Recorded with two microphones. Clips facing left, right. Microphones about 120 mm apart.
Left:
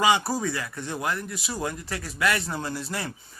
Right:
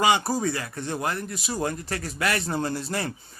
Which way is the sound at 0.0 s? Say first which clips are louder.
Right 1 dB; 25° right (ahead or behind).